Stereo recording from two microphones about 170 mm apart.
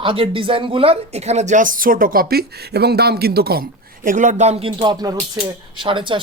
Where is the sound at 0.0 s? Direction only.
30° right (ahead or behind).